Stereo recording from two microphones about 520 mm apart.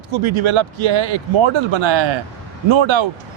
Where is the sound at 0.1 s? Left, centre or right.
Right.